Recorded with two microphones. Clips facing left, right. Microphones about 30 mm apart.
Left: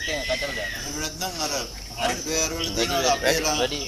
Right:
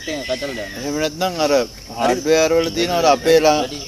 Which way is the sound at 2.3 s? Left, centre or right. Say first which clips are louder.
Right 12 dB; right.